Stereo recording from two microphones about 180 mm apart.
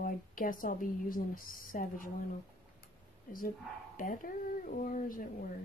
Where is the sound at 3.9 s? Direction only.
50° left (ahead or behind).